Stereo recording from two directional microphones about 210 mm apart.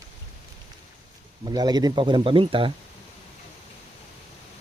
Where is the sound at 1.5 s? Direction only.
20° right (ahead or behind).